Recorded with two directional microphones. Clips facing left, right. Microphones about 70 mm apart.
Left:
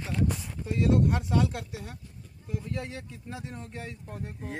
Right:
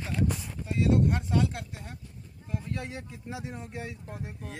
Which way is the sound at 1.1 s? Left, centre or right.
Centre.